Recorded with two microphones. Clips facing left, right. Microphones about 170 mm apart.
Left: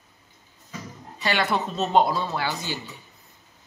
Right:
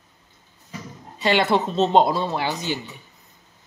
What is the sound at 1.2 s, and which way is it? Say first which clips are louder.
Speech: right 5 dB; 25° right (ahead or behind).